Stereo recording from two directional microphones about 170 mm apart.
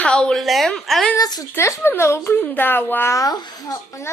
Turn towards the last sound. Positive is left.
turn(degrees=20)  # may be behind; listen again after turning